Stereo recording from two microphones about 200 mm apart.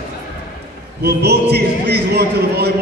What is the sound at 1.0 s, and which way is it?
A man's voice, 55° right (ahead or behind).